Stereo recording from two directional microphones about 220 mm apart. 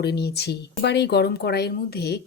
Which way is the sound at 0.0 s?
50° left (ahead or behind).